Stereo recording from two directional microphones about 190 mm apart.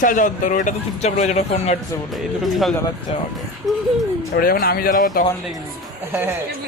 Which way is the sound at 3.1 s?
30° left (ahead or behind).